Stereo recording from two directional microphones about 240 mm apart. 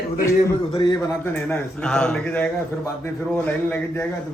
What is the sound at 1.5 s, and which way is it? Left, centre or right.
A man's voice, centre.